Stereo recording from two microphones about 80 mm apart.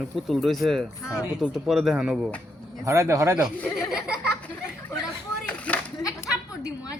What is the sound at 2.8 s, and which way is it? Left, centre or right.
Speech, right.